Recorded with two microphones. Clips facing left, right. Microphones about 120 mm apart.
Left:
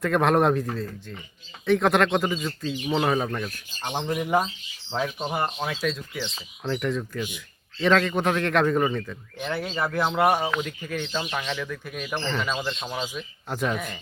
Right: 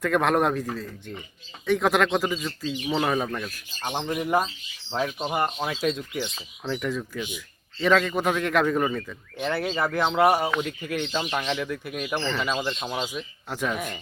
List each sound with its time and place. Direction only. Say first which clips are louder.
0.0 s a man's voice: left 1 dB; centre (ahead or behind)
4.9 s speech: right 1 dB; 5° right (ahead or behind)
5.6 s speech: right 2 dB; 15° right (ahead or behind)
6.7 s a man's voice: left 2 dB; centre (ahead or behind)
13.5 s a man's voice: left 1 dB; centre (ahead or behind)
13.7 s speech: right 1 dB; 10° right (ahead or behind)